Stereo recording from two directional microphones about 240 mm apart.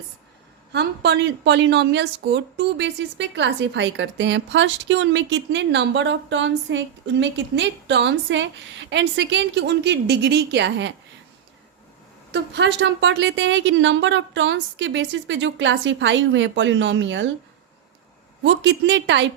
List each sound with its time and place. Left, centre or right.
0.7 s a woman's voice: right
12.3 s a woman's voice: right
18.4 s a woman's voice: right